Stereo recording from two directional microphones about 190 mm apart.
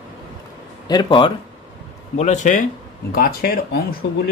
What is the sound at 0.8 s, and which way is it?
Speech, 25° left (ahead or behind).